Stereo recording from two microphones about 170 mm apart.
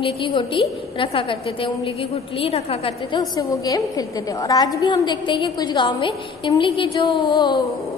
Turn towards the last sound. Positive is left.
turn(degrees=25)  # may be behind; listen again after turning